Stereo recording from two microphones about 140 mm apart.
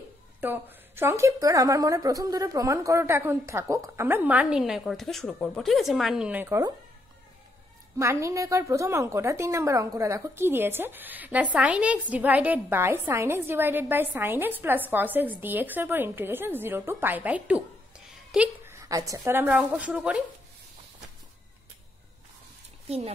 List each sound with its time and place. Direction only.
0.4 s a woman's voice: 15° right (ahead or behind)
8.0 s a woman's voice: 20° right (ahead or behind); by 18.5 s centre (ahead or behind)
18.7 s a woman's voice: 25° right (ahead or behind)
22.8 s speech: 45° right (ahead or behind)